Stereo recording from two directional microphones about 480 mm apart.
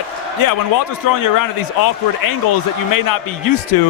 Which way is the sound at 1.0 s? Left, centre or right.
Left.